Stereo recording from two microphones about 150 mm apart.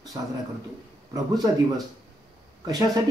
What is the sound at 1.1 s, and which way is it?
A man's voice, 25° right (ahead or behind).